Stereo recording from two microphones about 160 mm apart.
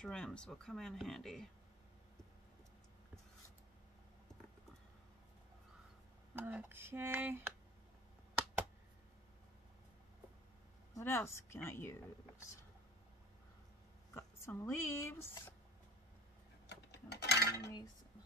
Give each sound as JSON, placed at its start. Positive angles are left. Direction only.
{"t": 0.0, "sound": "speech", "side_deg": 5}
{"t": 6.3, "sound": "speech", "side_deg": -10}
{"t": 11.0, "sound": "speech", "side_deg": 15}
{"t": 14.1, "sound": "speech", "side_deg": 15}
{"t": 16.9, "sound": "a sound", "side_deg": 90}